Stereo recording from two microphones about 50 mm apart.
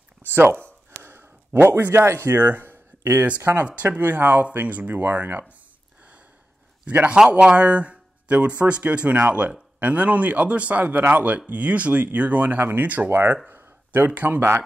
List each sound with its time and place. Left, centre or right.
0.3 s speech: right
1.0 s a sound: right
2.2 s speech: right
3.6 s speech: right
7.1 s speech: right
13.1 s speech: right